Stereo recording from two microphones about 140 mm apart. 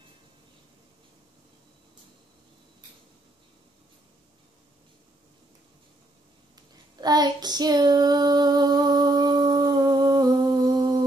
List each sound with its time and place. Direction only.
7.0 s child singing: 30° right (ahead or behind)